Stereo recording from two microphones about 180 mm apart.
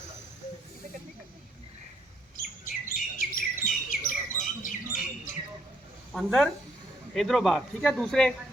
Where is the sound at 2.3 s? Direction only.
50° left (ahead or behind).